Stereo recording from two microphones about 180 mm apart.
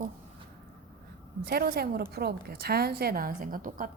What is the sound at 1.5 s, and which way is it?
A woman's voice, 60° right (ahead or behind).